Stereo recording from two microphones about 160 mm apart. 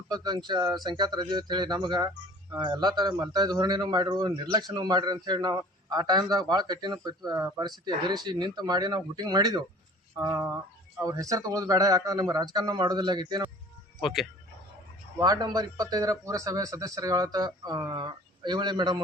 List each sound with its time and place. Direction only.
0.1 s a man's voice: 25° right (ahead or behind)
14.0 s speech: centre (ahead or behind)
15.2 s a man's voice: 25° right (ahead or behind)